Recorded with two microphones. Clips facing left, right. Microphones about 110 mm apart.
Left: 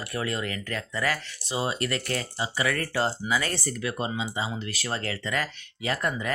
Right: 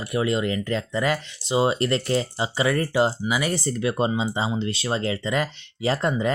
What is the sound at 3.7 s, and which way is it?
Speech, 30° right (ahead or behind).